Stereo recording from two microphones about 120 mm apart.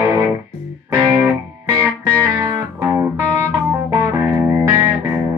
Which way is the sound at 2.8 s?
20° right (ahead or behind).